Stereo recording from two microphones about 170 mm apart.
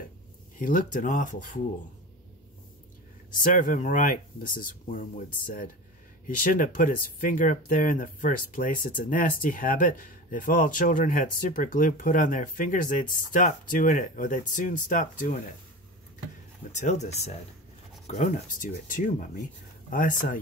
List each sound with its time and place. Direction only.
0.6 s speech: 50° left (ahead or behind)
3.4 s speech: 50° left (ahead or behind)
16.7 s speech: 45° left (ahead or behind)